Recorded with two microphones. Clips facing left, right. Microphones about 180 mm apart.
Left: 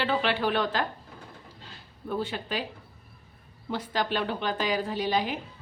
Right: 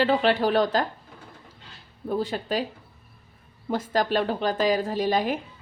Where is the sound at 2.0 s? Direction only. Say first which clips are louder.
Right 4 dB; 40° right (ahead or behind).